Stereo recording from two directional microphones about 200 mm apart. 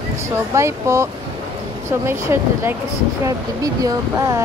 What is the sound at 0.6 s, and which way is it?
Speech, 15° right (ahead or behind).